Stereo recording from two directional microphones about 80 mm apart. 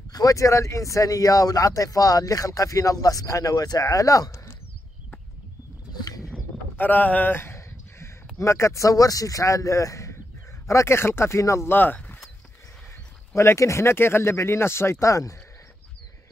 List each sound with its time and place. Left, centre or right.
0.1 s speech: left
5.9 s a sound: left
6.8 s speech: left
13.3 s speech: left